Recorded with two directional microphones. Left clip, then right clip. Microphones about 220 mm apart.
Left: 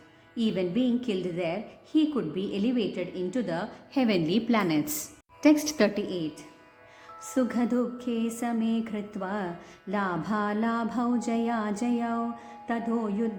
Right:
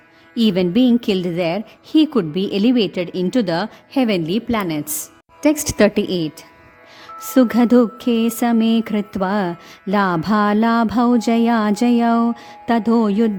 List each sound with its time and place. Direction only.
0.3 s music: 50° right (ahead or behind)